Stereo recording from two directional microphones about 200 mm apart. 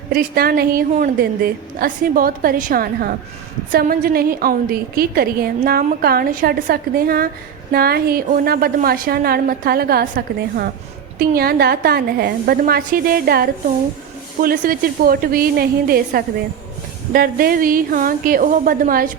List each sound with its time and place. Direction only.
0.1 s a woman's voice: 50° right (ahead or behind)